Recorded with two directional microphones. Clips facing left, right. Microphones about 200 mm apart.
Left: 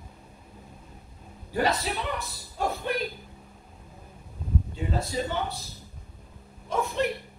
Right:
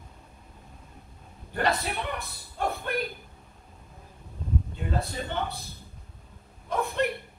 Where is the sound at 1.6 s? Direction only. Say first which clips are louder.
Right 1 dB; 55° right (ahead or behind).